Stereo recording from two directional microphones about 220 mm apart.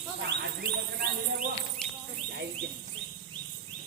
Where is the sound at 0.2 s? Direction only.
45° right (ahead or behind).